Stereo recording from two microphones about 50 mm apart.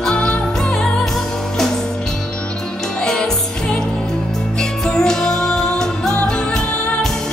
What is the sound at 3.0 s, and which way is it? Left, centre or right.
Music, centre.